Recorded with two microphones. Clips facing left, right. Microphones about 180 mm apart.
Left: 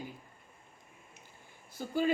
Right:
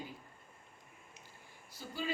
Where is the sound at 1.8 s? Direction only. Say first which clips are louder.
Left 8 dB; 55° left (ahead or behind).